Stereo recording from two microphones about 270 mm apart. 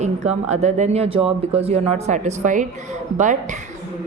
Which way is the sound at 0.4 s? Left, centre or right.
Right.